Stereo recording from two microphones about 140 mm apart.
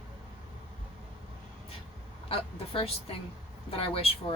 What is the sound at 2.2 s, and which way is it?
Speech, 40° left (ahead or behind).